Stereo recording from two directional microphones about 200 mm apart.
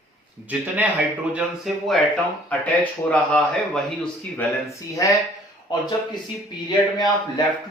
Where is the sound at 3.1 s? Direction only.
5° left (ahead or behind).